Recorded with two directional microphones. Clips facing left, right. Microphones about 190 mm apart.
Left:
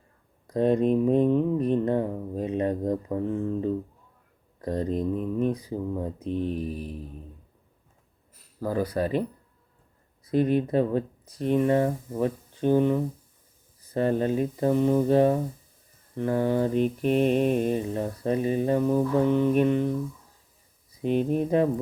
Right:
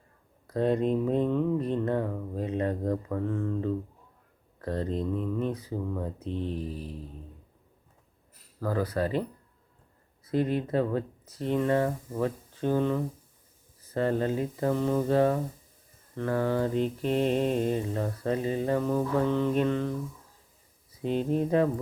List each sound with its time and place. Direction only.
0.4 s mantra: 20° left (ahead or behind)
8.6 s mantra: 15° left (ahead or behind)
10.3 s mantra: 15° left (ahead or behind)
13.9 s speech: 20° left (ahead or behind)
16.1 s mantra: 20° left (ahead or behind)
21.0 s mantra: 15° left (ahead or behind)